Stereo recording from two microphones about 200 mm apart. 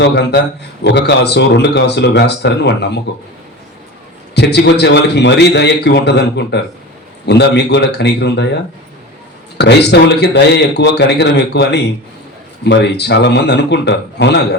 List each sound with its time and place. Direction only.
0.0 s a man's voice: 60° left (ahead or behind)
4.4 s a man's voice: 55° left (ahead or behind)
9.6 s a man's voice: 55° left (ahead or behind)